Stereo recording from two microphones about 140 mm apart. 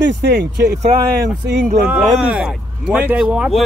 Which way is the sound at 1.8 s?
5° right (ahead or behind).